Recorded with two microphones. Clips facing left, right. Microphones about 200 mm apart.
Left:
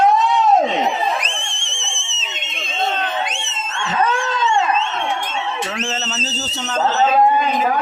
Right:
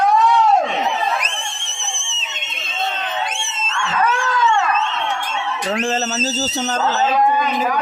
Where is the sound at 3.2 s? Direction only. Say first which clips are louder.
Right 1 dB; 20° left (ahead or behind).